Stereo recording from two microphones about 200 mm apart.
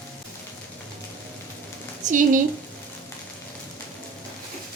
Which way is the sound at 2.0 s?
40° right (ahead or behind).